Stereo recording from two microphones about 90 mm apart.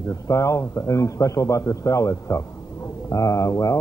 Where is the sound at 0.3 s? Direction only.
35° left (ahead or behind).